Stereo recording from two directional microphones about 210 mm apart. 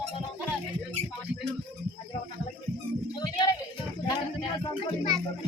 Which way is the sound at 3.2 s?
20° left (ahead or behind).